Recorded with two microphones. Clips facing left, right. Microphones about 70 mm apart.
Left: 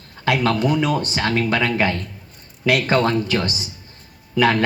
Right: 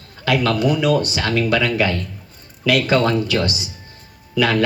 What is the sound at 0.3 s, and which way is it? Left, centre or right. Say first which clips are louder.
Speech: right 1 dB; left.